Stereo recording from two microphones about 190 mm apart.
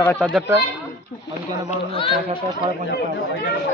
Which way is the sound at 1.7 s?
30° left (ahead or behind).